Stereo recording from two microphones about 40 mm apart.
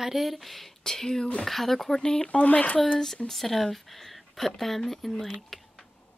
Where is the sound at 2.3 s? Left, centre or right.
Left.